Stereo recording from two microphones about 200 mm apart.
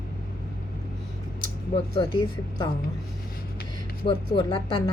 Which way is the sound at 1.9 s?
25° left (ahead or behind).